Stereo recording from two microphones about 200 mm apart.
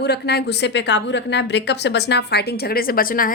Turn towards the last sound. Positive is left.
turn(degrees=45)  # may be behind; listen again after turning